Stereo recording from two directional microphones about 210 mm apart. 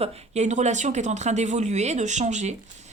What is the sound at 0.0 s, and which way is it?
A woman's voice, 30° right (ahead or behind).